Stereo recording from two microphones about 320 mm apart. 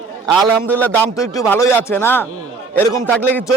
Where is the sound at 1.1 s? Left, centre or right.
Centre.